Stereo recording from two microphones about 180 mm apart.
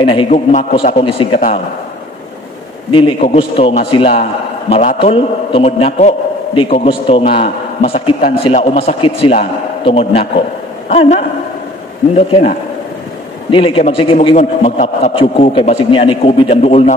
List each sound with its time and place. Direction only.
0.0 s a man's voice: 30° left (ahead or behind)
0.3 s a man's voice: 40° left (ahead or behind)
0.9 s a man's voice: 30° left (ahead or behind)
2.9 s a man's voice: 30° left (ahead or behind)